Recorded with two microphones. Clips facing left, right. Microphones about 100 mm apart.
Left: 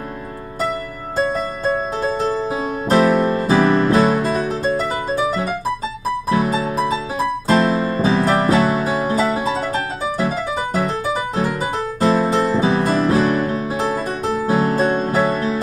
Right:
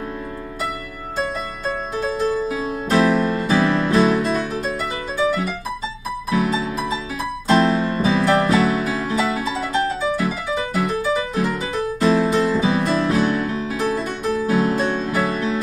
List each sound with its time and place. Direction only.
1.1 s music: 35° left (ahead or behind)
6.3 s music: 35° left (ahead or behind)